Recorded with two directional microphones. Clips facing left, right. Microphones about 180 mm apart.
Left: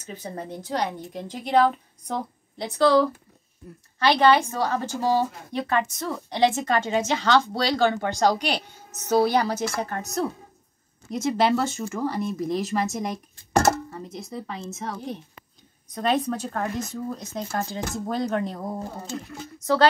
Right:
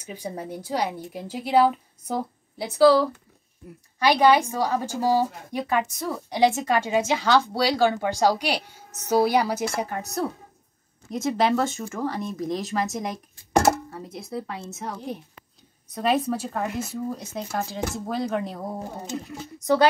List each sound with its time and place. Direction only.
0.0 s a woman's voice: 10° right (ahead or behind)
4.0 s a woman's voice: 10° right (ahead or behind)
11.1 s a woman's voice: centre (ahead or behind)
18.9 s a woman's voice: 20° right (ahead or behind)